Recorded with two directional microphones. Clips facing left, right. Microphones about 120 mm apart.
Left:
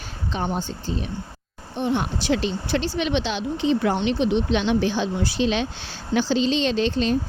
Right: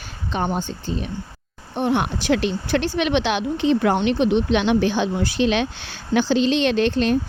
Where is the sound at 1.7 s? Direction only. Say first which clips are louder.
Right 3 dB; 60° right (ahead or behind).